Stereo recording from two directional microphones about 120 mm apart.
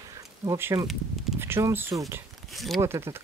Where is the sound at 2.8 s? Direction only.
20° right (ahead or behind).